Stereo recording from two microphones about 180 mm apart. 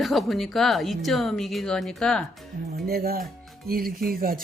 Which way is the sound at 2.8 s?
55° right (ahead or behind).